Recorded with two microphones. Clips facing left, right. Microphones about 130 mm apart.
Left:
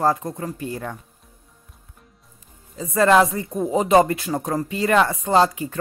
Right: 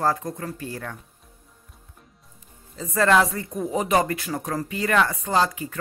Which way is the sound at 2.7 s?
15° left (ahead or behind).